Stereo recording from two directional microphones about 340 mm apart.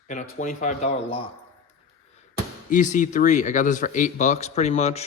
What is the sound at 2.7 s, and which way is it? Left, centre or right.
Speech, left.